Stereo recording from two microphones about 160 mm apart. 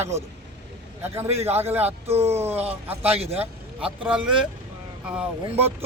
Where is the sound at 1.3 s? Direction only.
40° right (ahead or behind).